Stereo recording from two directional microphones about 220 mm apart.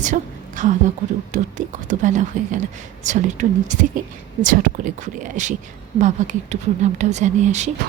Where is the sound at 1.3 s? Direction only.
35° right (ahead or behind).